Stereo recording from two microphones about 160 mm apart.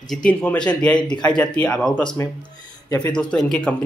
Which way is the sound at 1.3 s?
10° left (ahead or behind).